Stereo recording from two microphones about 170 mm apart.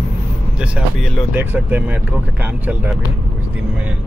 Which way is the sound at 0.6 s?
Centre (ahead or behind).